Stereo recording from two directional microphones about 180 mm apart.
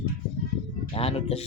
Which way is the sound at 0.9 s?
35° left (ahead or behind).